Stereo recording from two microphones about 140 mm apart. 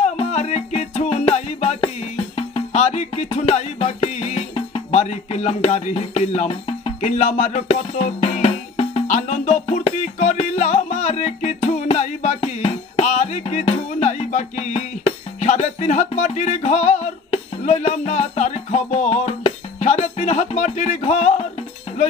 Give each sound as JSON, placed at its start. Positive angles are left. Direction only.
{"t": 0.0, "sound": "music", "side_deg": 50}